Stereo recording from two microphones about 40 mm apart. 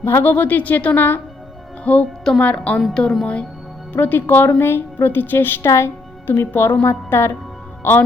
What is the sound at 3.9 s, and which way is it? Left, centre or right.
A woman's voice, left.